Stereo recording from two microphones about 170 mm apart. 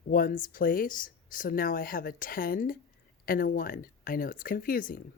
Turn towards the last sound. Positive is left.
turn(degrees=55)  # may be behind; listen again after turning